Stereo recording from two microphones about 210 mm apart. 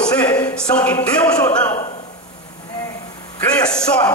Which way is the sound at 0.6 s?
5° left (ahead or behind).